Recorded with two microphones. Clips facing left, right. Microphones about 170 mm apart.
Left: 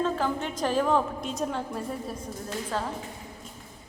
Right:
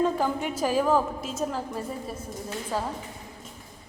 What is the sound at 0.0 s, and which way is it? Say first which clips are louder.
A woman's voice: right 2 dB; 10° right (ahead or behind).